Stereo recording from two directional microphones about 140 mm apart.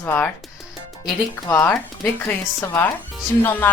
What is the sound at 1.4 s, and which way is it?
Speech, 15° left (ahead or behind).